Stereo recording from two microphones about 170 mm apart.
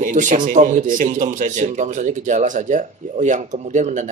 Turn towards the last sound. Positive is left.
turn(degrees=-45)  # may be behind; listen again after turning